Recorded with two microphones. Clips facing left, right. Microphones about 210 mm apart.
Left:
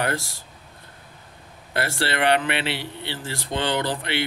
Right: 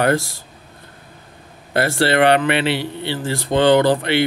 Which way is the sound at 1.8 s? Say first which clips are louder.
Right 8 dB; 45° right (ahead or behind).